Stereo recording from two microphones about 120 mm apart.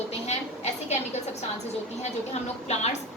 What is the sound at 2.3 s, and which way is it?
Speech, 65° left (ahead or behind).